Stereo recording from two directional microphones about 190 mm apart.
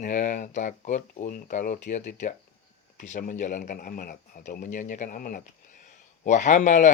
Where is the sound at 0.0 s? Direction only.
40° left (ahead or behind).